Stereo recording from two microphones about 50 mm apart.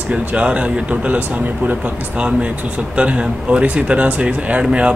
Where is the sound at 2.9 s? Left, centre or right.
Right.